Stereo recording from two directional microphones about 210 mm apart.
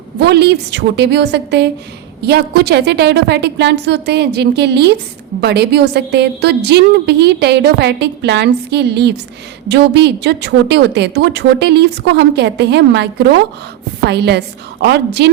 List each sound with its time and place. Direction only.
0.2 s a woman's voice: 50° right (ahead or behind)